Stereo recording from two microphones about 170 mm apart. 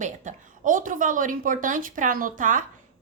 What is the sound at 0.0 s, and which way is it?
A woman's voice, 50° right (ahead or behind).